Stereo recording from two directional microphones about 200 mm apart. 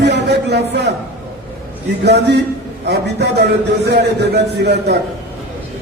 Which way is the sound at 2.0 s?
55° right (ahead or behind).